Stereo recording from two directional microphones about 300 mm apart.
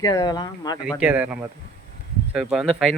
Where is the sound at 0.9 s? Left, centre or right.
Centre.